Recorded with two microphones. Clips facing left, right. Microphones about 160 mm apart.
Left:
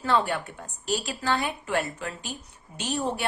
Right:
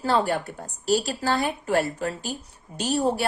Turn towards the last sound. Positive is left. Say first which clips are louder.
# right 5 dB
turn(degrees=-35)  # may be behind; listen again after turning